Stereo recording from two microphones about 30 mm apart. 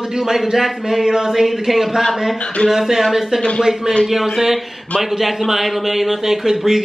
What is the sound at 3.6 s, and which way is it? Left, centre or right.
Speech, centre.